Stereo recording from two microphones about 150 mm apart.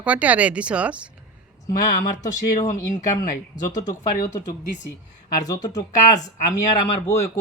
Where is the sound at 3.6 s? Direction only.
25° left (ahead or behind).